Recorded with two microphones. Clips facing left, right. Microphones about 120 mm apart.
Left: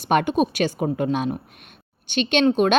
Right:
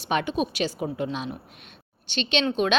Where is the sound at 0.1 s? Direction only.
55° left (ahead or behind).